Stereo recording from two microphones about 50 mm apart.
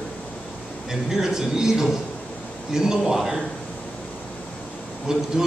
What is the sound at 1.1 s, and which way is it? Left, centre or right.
A man's voice, centre.